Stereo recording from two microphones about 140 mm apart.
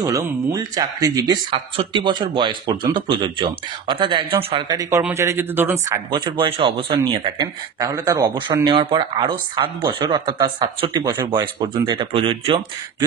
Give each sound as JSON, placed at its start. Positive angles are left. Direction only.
{"t": 0.0, "sound": "speech", "side_deg": -25}
{"t": 4.6, "sound": "speech", "side_deg": -25}
{"t": 6.1, "sound": "speech", "side_deg": -35}
{"t": 7.8, "sound": "speech", "side_deg": -25}
{"t": 12.1, "sound": "speech", "side_deg": -40}